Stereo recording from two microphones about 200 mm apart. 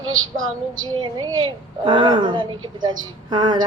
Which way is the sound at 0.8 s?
25° right (ahead or behind).